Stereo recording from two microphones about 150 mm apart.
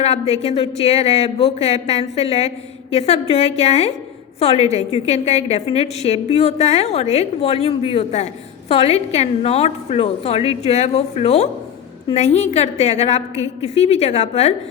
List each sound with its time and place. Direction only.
0.0 s a woman's voice: 45° left (ahead or behind)
13.3 s a woman's voice: 20° right (ahead or behind)
13.7 s a woman's voice: 45° left (ahead or behind)